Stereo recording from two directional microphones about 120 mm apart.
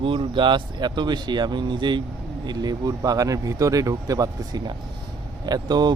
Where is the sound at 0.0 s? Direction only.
45° right (ahead or behind).